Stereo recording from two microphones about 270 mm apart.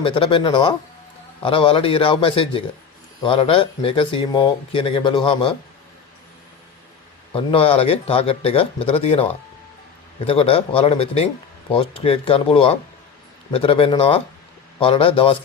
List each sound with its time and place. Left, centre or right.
0.0 s speech: centre
7.3 s speech: left